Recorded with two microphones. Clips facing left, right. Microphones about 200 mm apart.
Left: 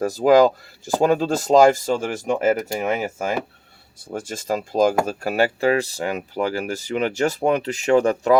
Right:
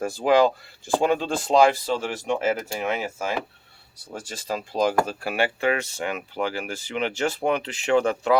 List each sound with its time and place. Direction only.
0.0 s speech: 40° left (ahead or behind)
4.1 s speech: 50° left (ahead or behind)